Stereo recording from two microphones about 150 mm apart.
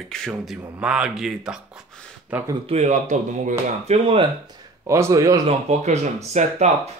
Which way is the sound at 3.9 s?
40° right (ahead or behind).